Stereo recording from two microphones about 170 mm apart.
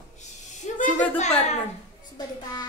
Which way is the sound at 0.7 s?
45° left (ahead or behind).